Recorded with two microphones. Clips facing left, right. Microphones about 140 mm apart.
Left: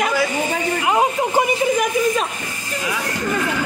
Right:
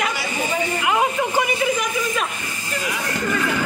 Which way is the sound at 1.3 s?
50° left (ahead or behind).